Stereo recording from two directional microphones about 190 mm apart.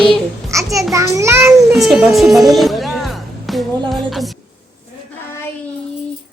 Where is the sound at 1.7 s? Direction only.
Centre (ahead or behind).